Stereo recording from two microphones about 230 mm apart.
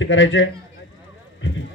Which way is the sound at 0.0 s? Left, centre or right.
Left.